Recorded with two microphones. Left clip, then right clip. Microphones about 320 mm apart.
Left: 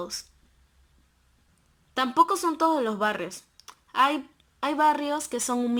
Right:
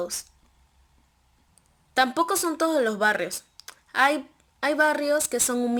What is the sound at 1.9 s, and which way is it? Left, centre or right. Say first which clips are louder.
Speech: even; centre.